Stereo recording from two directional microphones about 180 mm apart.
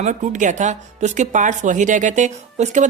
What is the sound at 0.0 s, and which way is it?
Speech, 45° right (ahead or behind).